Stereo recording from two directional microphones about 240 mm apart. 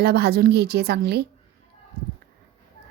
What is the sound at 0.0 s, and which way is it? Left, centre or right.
A woman's voice, right.